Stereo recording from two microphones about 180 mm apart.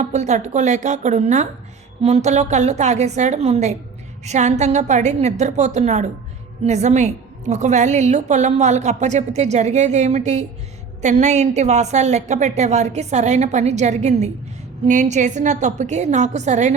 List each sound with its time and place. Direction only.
0.0 s a woman's voice: 40° right (ahead or behind)